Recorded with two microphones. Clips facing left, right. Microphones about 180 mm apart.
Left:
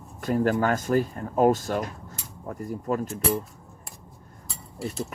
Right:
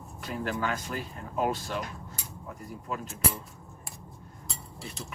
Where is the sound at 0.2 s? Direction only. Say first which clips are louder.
Left 9 dB; 45° left (ahead or behind).